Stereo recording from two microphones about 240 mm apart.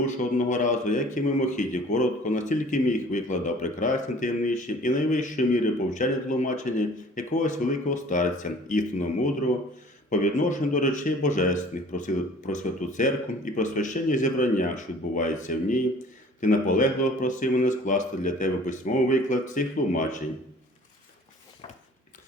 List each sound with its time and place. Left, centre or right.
0.0 s speech: left